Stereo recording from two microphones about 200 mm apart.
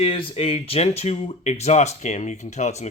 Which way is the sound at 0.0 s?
25° left (ahead or behind).